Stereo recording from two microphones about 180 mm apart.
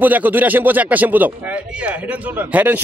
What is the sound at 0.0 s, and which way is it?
Speech, 10° right (ahead or behind).